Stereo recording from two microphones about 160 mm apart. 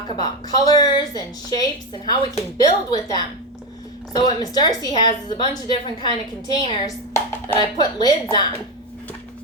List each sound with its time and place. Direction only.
0.1 s a woman's voice: 25° left (ahead or behind)